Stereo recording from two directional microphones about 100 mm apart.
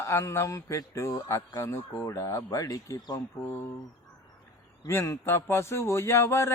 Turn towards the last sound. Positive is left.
turn(degrees=25)  # may be behind; listen again after turning